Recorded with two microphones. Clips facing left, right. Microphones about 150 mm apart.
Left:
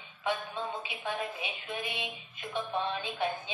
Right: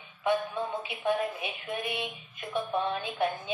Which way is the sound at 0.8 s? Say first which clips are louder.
Right 7 dB; 50° right (ahead or behind).